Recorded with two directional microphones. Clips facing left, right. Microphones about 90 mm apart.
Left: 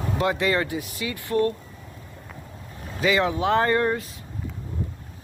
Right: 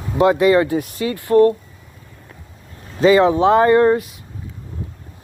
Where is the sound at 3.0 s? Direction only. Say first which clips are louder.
Right 10 dB; 30° right (ahead or behind).